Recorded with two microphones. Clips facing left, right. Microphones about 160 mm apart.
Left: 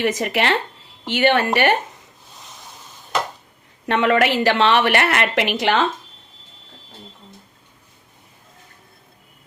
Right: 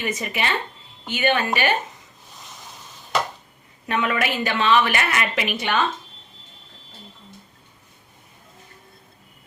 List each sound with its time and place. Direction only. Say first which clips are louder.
0.0 s a woman's voice: left 6 dB; 80° left
3.8 s a woman's voice: left 6 dB; 75° left (ahead or behind)